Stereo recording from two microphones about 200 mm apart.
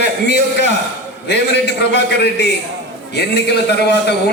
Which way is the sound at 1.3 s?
55° left (ahead or behind).